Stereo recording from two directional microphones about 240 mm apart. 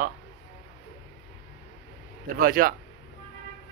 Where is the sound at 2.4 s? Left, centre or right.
Right.